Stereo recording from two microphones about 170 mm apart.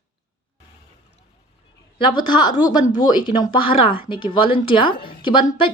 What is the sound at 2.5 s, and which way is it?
Speech, 50° left (ahead or behind).